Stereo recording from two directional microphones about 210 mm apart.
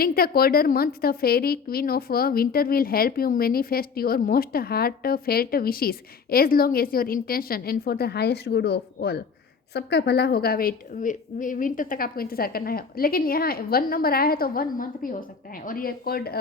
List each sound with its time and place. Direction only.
0.0 s a woman's voice: 45° left (ahead or behind)